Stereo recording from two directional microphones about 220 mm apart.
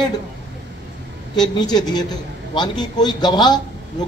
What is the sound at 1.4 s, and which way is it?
Speech, 20° left (ahead or behind).